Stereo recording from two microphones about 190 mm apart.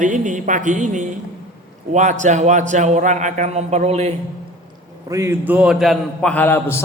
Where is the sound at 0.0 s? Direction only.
40° right (ahead or behind).